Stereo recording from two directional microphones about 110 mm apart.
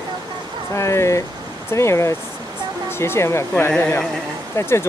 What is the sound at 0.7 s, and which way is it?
Speech, 25° left (ahead or behind).